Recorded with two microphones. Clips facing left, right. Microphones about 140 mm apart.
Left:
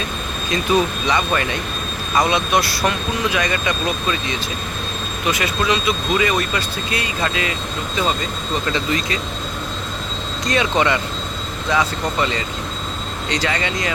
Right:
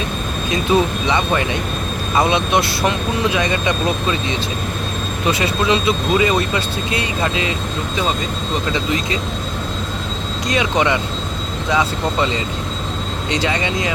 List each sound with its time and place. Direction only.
0.5 s speech: 25° right (ahead or behind)
8.7 s speech: 20° right (ahead or behind)
10.5 s speech: 15° right (ahead or behind)